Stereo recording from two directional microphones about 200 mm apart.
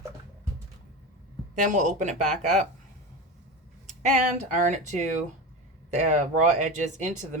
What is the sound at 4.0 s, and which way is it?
Speech, 35° right (ahead or behind).